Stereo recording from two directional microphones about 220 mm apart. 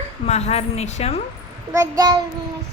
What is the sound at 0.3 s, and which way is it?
Speech, 30° left (ahead or behind).